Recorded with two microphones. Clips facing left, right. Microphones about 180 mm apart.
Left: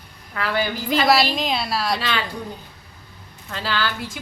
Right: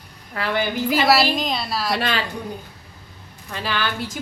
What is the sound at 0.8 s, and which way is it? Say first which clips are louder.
A woman's voice: even; 5° right (ahead or behind).